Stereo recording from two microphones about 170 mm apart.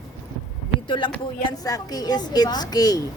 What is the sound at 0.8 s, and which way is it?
A woman's voice, 30° left (ahead or behind).